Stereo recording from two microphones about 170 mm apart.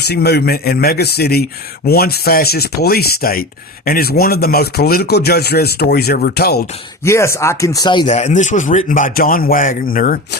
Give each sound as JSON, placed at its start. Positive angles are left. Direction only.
{"t": 0.1, "sound": "speech", "side_deg": 70}
{"t": 7.0, "sound": "speech", "side_deg": 15}
{"t": 8.0, "sound": "speech", "side_deg": 45}